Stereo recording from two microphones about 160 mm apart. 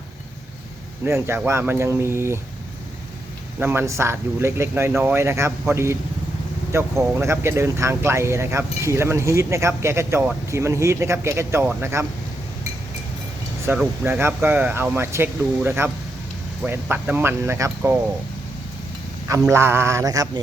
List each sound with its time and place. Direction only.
1.0 s speech: 15° right (ahead or behind)
3.6 s speech: 15° right (ahead or behind)
13.7 s speech: 15° right (ahead or behind)
19.3 s speech: 20° right (ahead or behind)